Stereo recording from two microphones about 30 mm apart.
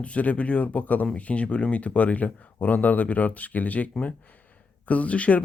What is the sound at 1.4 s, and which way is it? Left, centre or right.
Speech, left.